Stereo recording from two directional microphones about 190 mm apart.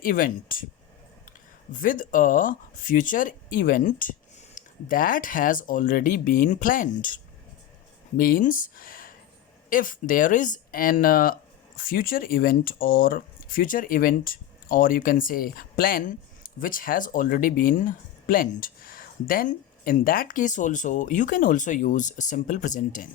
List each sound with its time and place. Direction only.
0.0 s speech: 45° left (ahead or behind)
1.7 s speech: 45° left (ahead or behind)